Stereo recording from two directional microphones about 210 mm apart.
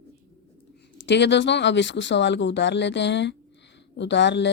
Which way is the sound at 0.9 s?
55° left (ahead or behind).